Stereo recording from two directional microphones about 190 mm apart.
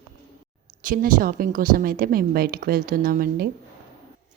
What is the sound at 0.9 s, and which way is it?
A woman's voice, 45° right (ahead or behind).